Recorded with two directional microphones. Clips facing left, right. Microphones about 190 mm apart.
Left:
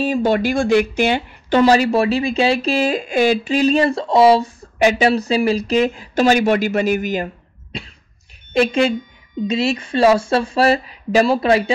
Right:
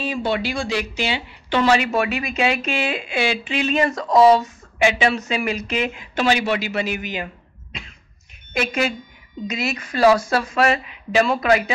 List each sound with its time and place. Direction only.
0.0 s speech: 45° left (ahead or behind)
8.5 s speech: 30° left (ahead or behind)